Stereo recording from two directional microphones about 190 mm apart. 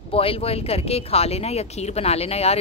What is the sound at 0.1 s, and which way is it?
Speech, 30° left (ahead or behind).